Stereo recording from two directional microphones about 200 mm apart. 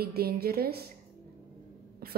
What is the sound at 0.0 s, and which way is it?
Speech, 50° right (ahead or behind).